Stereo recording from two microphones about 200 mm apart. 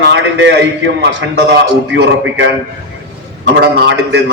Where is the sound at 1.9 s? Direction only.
65° right (ahead or behind).